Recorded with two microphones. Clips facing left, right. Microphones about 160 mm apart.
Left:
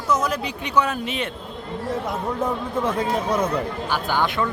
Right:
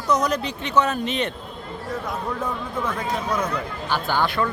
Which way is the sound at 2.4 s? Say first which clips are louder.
Left 4 dB; 25° left (ahead or behind).